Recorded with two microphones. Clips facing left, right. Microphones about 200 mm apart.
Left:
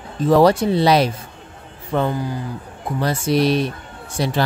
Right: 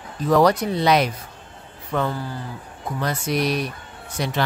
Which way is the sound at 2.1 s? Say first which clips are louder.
Left 6 dB; 15° left (ahead or behind).